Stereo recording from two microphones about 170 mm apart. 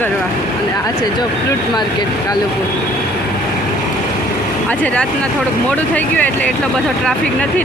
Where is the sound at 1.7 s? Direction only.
25° left (ahead or behind).